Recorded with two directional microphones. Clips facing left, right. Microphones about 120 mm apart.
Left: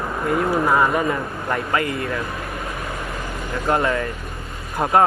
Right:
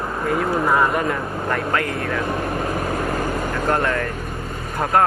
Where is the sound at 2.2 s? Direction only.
55° right (ahead or behind).